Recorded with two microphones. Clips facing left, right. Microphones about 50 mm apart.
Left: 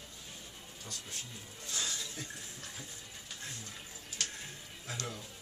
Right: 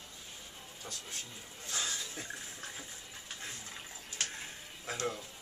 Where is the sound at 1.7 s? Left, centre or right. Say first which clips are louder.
Right 1 dB; right.